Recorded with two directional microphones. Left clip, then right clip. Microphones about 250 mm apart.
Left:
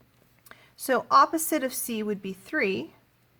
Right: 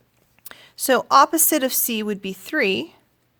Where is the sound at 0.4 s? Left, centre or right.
Right.